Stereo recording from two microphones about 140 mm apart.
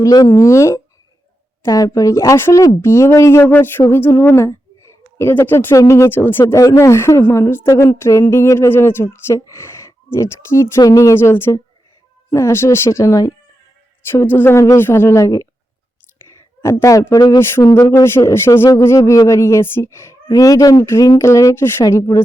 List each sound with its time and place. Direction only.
0.0 s a woman's voice: 25° left (ahead or behind)
16.6 s speech: 20° left (ahead or behind)